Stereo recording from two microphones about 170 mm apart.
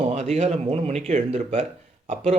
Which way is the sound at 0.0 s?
40° right (ahead or behind).